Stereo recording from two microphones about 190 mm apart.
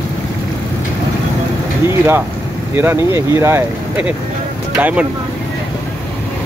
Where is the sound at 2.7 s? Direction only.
15° right (ahead or behind).